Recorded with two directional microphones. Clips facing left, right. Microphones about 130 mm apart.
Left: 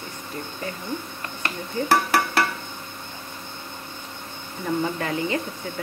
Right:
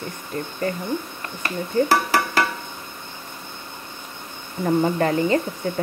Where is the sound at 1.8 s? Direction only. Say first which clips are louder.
Right 8 dB; 45° right (ahead or behind).